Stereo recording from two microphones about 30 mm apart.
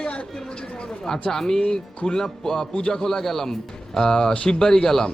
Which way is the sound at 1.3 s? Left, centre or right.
Centre.